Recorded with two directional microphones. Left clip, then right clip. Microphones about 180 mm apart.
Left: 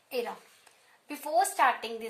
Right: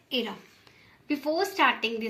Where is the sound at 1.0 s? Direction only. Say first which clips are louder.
Even; 45° left (ahead or behind).